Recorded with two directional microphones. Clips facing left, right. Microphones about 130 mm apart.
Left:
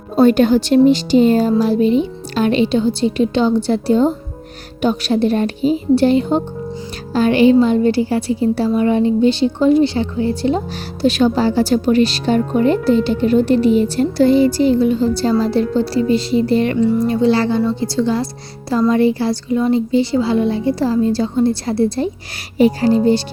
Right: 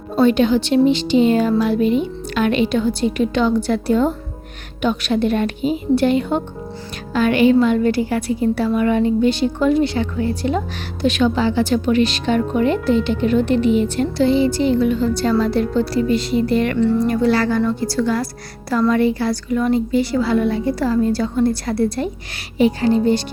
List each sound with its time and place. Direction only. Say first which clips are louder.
0.2 s a woman's voice: left 3 dB; 45° left (ahead or behind)